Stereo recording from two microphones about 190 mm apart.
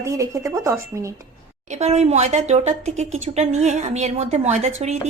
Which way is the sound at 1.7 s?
35° right (ahead or behind).